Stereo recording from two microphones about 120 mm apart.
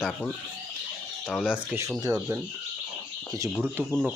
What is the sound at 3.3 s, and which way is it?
Speech, 25° right (ahead or behind).